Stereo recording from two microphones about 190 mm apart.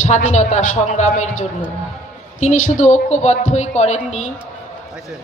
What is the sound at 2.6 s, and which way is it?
Speech, 40° left (ahead or behind).